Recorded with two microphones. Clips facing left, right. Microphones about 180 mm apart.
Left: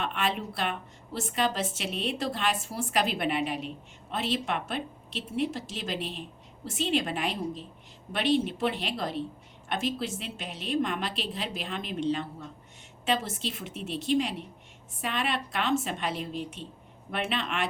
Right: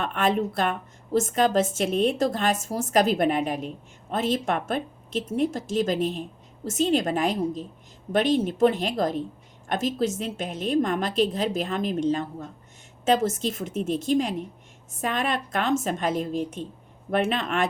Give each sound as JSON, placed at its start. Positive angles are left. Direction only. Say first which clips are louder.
{"t": 0.0, "sound": "a woman's voice", "louder": "right 7 dB", "side_deg": -45}